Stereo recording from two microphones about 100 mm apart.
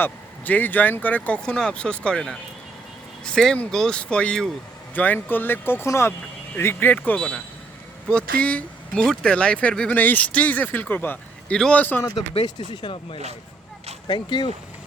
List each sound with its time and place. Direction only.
0.0 s speech: 15° left (ahead or behind)
12.5 s speech: 50° left (ahead or behind)